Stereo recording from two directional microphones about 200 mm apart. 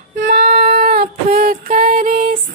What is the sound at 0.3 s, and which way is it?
Music, 50° right (ahead or behind).